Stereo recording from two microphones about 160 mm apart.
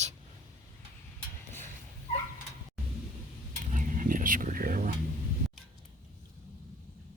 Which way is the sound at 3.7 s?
55° right (ahead or behind).